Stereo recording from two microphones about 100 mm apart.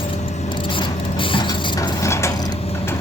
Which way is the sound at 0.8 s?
55° left (ahead or behind).